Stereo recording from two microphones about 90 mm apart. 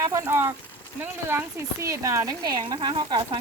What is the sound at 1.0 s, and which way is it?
Speech, 25° right (ahead or behind).